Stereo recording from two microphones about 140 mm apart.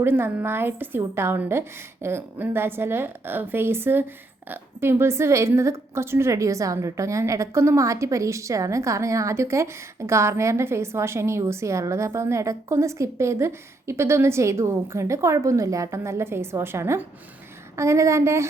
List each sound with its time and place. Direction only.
0.0 s a woman's voice: 15° right (ahead or behind)